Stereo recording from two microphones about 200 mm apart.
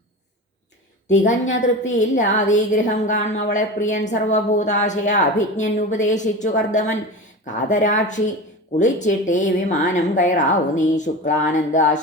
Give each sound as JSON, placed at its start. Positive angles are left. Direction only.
{"t": 1.3, "sound": "a woman's voice", "side_deg": 35}